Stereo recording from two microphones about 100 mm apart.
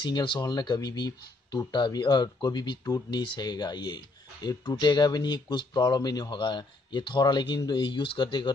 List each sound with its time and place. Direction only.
0.0 s speech: 50° left (ahead or behind)